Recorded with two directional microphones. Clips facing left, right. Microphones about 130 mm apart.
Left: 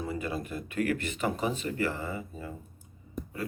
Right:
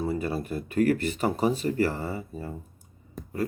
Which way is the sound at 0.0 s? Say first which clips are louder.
Right 5 dB; 35° right (ahead or behind).